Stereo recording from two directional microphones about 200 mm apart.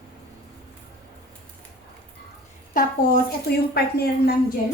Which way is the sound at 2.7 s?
45° left (ahead or behind).